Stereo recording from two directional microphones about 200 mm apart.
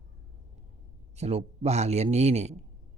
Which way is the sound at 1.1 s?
30° right (ahead or behind).